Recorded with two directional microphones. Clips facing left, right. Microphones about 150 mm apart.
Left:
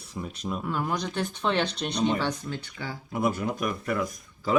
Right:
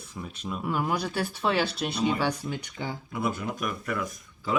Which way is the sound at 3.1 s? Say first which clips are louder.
Left 5 dB; 45° left (ahead or behind).